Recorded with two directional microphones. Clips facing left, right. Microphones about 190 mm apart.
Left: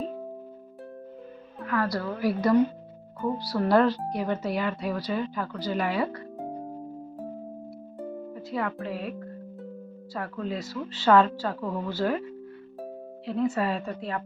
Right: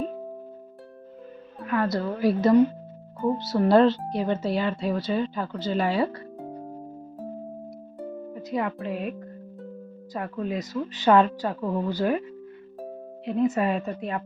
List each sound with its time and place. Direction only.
1.6 s speech: 20° right (ahead or behind)
7.9 s music: 15° right (ahead or behind)
10.2 s speech: 20° right (ahead or behind)
13.2 s speech: 20° right (ahead or behind)